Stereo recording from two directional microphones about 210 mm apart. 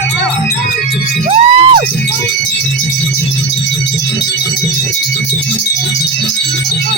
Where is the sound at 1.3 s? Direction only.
25° right (ahead or behind).